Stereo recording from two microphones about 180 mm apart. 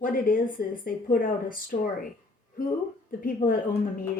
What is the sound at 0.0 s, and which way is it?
Speech, 50° left (ahead or behind).